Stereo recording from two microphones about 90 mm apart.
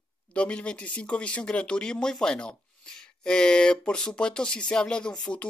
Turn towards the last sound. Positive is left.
turn(degrees=10)  # may be behind; listen again after turning